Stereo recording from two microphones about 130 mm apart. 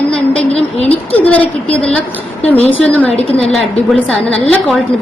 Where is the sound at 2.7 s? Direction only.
10° left (ahead or behind).